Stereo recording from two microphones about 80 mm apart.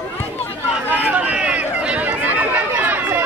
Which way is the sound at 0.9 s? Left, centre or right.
Centre.